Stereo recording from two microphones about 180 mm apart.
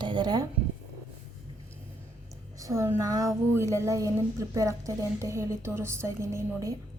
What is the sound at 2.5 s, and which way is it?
A woman's voice, 15° right (ahead or behind).